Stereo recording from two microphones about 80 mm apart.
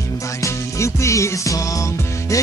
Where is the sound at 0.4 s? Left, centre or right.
Left.